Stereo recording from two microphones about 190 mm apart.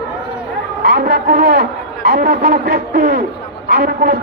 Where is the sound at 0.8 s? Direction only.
55° right (ahead or behind).